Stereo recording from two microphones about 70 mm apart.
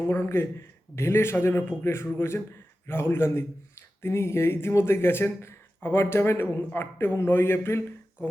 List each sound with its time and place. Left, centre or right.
0.1 s speech: left